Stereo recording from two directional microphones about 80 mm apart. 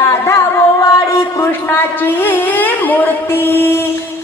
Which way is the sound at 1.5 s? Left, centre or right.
Left.